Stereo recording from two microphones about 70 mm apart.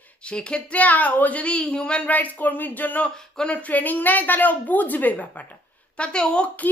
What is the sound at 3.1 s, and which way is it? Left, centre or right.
Speech, centre.